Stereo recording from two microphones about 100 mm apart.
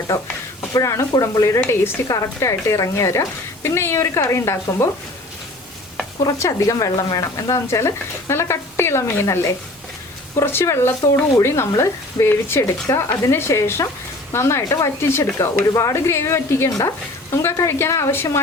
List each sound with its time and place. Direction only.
0.1 s a woman's voice: 25° left (ahead or behind)
6.2 s a woman's voice: 35° left (ahead or behind)